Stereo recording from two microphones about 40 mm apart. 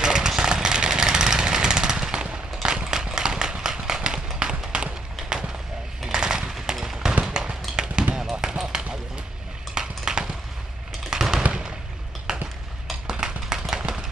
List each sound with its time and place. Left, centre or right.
0.0 s a sound: centre
0.4 s jackhammer: centre
4.4 s run: centre
6.1 s machine gun: centre
6.5 s gunshot: centre
7.2 s fireworks: centre
7.7 s basketball bounce: centre
9.8 s a sound: centre